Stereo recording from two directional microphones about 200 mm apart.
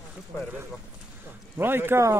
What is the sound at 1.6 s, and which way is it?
Speech, 10° right (ahead or behind).